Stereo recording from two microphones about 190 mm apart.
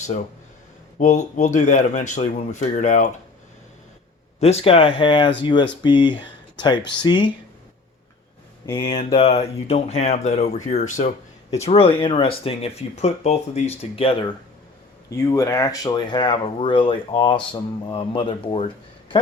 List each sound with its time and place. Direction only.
0.9 s speech: 40° left (ahead or behind)
4.4 s speech: 35° left (ahead or behind)
8.7 s speech: 30° left (ahead or behind)
15.1 s speech: 15° left (ahead or behind)